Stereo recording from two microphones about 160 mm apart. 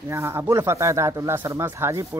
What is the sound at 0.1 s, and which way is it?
Speech, 15° right (ahead or behind).